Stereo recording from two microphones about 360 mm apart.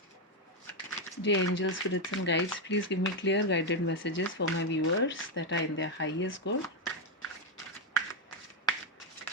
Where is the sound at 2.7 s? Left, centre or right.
Left.